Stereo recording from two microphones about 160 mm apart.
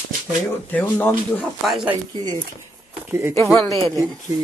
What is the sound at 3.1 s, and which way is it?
Speech, 15° right (ahead or behind).